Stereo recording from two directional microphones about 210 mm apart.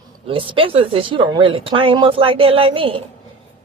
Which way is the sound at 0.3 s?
25° right (ahead or behind).